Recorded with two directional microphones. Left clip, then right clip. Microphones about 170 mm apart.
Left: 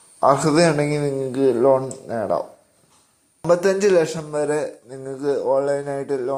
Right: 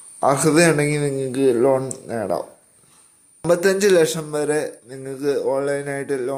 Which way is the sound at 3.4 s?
15° right (ahead or behind).